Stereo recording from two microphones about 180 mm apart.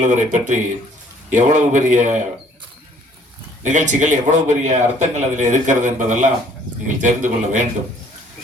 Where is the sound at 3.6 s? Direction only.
45° right (ahead or behind).